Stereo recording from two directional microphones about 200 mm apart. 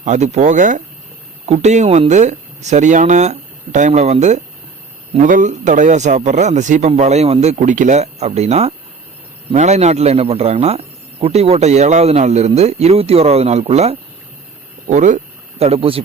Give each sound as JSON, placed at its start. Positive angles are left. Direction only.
{"t": 0.0, "sound": "a man's voice", "side_deg": -35}